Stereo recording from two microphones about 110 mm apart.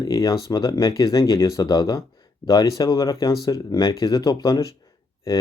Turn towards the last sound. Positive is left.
turn(degrees=30)  # may be behind; listen again after turning